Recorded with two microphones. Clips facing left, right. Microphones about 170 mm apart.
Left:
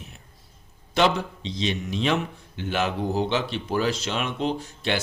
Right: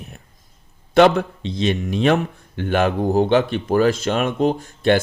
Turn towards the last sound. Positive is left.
turn(degrees=-50)  # may be behind; listen again after turning